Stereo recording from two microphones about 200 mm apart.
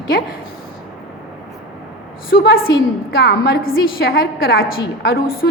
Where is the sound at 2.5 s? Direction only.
80° left.